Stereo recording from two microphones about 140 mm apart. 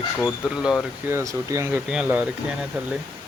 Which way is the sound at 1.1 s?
20° right (ahead or behind).